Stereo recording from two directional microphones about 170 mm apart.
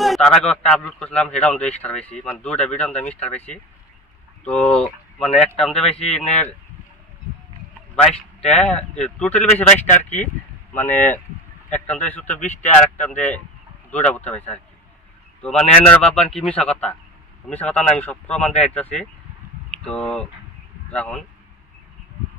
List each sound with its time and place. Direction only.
0.0 s a man's voice: centre (ahead or behind)
7.9 s a man's voice: 5° left (ahead or behind)
10.9 s speech: 45° left (ahead or behind)
11.9 s a man's voice: 10° left (ahead or behind)